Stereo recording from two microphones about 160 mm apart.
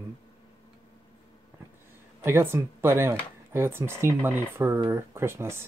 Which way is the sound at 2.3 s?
15° right (ahead or behind).